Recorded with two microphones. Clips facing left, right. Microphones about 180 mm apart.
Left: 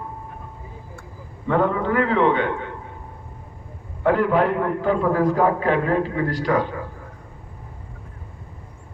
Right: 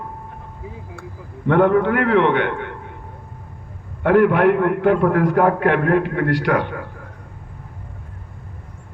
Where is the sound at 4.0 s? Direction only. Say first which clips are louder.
Right 4 dB; 65° right (ahead or behind).